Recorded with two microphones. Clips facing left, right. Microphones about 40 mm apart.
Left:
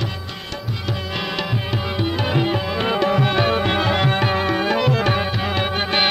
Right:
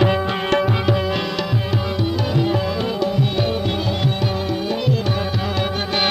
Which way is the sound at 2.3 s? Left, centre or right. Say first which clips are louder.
Right 1 dB; left.